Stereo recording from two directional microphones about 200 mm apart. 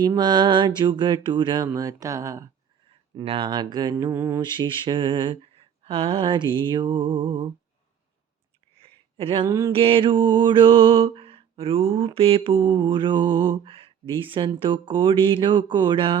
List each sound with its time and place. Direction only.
0.0 s mantra: 20° right (ahead or behind)
8.7 s a sound: 30° right (ahead or behind)
9.8 s mantra: 25° right (ahead or behind)